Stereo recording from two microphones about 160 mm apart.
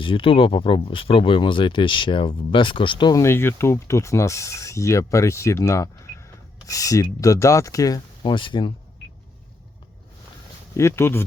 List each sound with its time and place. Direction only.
0.0 s speech: 30° left (ahead or behind)
3.2 s speech: 15° left (ahead or behind); by 8.7 s 30° left (ahead or behind)
10.8 s speech: 15° left (ahead or behind)